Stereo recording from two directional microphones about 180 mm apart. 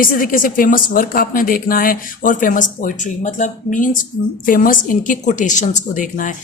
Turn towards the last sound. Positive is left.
turn(degrees=45)  # may be behind; listen again after turning